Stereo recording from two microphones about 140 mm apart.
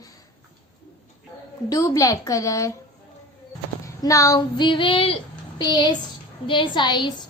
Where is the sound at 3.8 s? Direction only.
25° left (ahead or behind).